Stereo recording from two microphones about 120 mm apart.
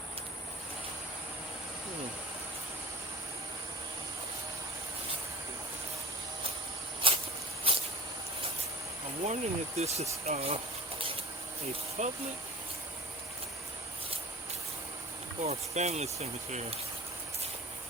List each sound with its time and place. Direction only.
7.0 s a sound: 45° right (ahead or behind)
7.7 s snake: 50° right (ahead or behind)
9.2 s speech: 70° right (ahead or behind)
10.2 s a sound: 65° right (ahead or behind)
12.0 s speech: 75° right (ahead or behind)
15.4 s speech: 65° right (ahead or behind)